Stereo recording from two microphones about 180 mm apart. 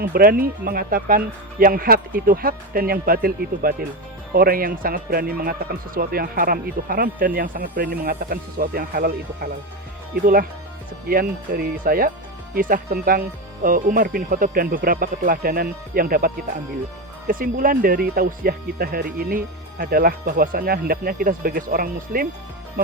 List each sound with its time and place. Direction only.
0.0 s a man's voice: 55° right (ahead or behind)
11.1 s a man's voice: 55° right (ahead or behind)